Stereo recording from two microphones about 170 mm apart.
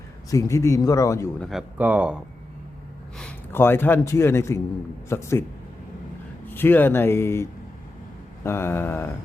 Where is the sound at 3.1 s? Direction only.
5° left (ahead or behind).